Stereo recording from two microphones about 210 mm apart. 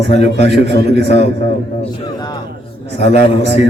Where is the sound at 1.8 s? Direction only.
20° left (ahead or behind).